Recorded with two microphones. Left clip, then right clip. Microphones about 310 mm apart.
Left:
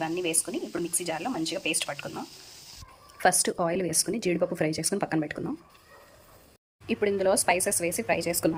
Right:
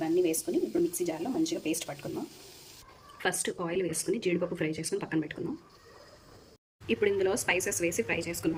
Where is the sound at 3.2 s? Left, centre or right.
Centre.